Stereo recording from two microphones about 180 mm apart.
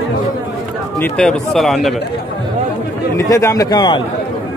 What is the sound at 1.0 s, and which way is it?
Speech, 5° left (ahead or behind).